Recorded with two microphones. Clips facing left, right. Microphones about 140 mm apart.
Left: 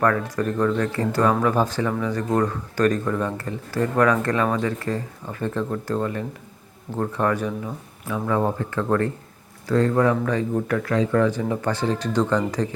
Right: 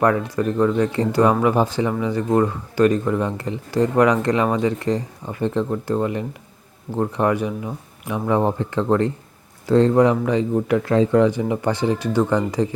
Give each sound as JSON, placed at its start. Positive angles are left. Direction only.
{"t": 0.0, "sound": "speech", "side_deg": -15}
{"t": 11.1, "sound": "speech", "side_deg": -15}